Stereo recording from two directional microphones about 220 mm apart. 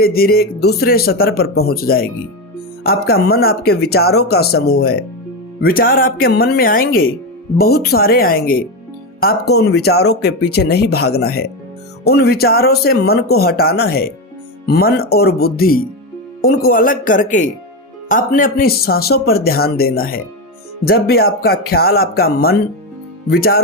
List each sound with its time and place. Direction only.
0.0 s speech: 45° left (ahead or behind)